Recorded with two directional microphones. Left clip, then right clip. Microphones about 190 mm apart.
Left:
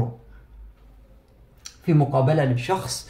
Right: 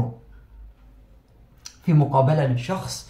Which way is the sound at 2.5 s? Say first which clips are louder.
Left 4 dB; 35° left (ahead or behind).